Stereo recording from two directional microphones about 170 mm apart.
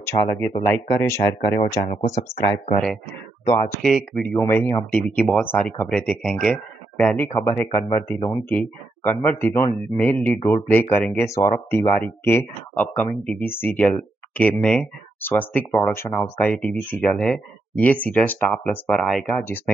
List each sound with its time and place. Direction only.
0.0 s speech: 15° left (ahead or behind)
1.9 s speech: 45° left (ahead or behind)
3.8 s speech: 5° left (ahead or behind)
7.3 s speech: 20° left (ahead or behind)